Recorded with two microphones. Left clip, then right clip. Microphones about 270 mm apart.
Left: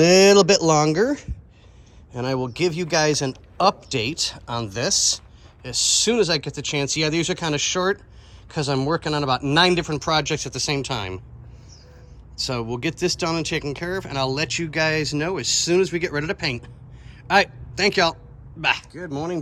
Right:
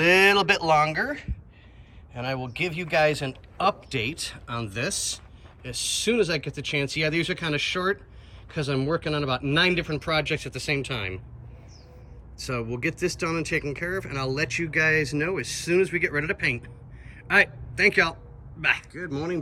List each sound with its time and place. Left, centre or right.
0.4 s a man's voice: centre
12.4 s a man's voice: centre